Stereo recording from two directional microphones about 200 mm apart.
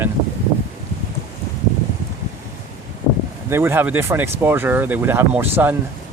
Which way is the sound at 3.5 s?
10° right (ahead or behind).